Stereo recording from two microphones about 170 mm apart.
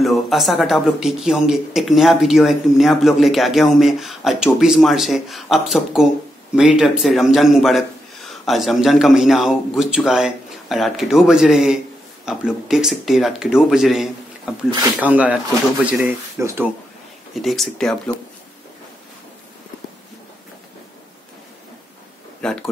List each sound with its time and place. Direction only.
0.0 s speech: centre (ahead or behind); by 16.6 s 15° right (ahead or behind)
17.4 s speech: centre (ahead or behind)
22.4 s speech: 5° left (ahead or behind)